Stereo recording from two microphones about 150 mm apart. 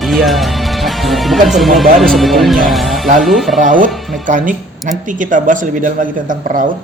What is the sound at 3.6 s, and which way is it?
A woman's voice, 60° right (ahead or behind).